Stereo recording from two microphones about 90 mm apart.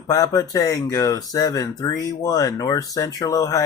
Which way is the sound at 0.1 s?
45° left (ahead or behind).